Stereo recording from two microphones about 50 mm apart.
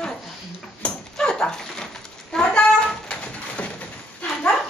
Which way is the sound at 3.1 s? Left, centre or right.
Left.